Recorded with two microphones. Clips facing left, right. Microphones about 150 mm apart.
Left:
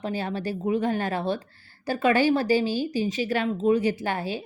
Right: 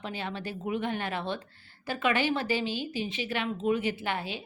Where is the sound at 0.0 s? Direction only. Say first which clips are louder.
Left 7 dB; 40° left (ahead or behind).